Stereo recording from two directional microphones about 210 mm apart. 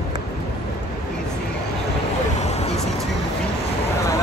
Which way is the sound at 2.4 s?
30° left (ahead or behind).